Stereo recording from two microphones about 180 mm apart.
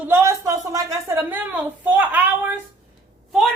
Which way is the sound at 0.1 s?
15° right (ahead or behind).